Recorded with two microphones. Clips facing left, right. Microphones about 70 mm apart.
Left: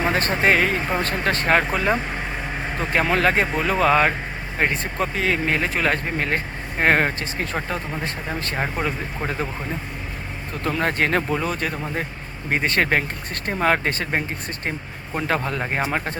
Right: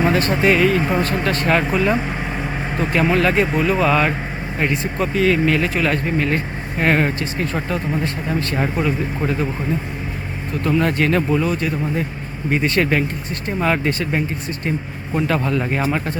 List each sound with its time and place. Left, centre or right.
0.1 s speech: left
10.6 s speech: left